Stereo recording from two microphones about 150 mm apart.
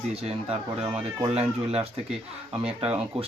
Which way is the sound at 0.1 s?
40° right (ahead or behind).